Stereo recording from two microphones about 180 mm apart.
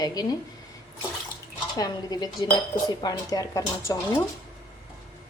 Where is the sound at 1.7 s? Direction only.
20° left (ahead or behind).